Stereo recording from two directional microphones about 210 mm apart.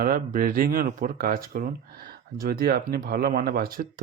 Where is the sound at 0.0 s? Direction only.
40° right (ahead or behind).